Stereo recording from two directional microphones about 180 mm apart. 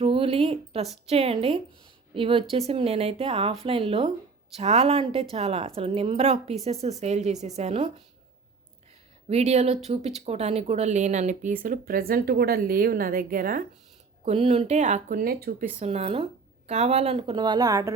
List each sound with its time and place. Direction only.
0.0 s speech: 30° right (ahead or behind)
9.3 s speech: 35° right (ahead or behind)
14.3 s speech: 35° right (ahead or behind); by 15.7 s 55° right (ahead or behind)
15.8 s speech: 35° right (ahead or behind); by 17.9 s 20° right (ahead or behind)